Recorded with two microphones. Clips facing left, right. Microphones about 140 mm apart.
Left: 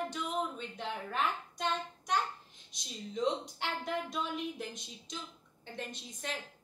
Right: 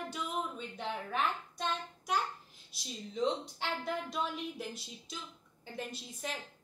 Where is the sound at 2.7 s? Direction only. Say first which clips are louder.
Left 1 dB; 5° right (ahead or behind).